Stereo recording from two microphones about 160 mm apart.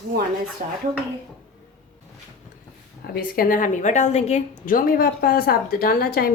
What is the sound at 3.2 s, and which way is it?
A woman's voice, 60° left (ahead or behind).